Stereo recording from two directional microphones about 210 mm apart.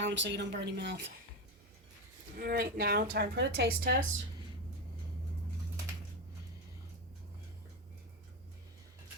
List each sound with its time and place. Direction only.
0.0 s speech: 60° right (ahead or behind)
2.4 s a woman's voice: 45° right (ahead or behind)